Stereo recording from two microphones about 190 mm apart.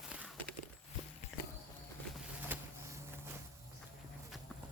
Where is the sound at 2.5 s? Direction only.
10° right (ahead or behind).